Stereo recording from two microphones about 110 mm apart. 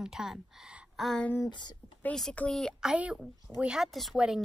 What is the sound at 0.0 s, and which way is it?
A woman's voice, 5° right (ahead or behind).